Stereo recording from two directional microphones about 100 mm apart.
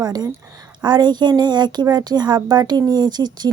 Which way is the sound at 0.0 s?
40° right (ahead or behind).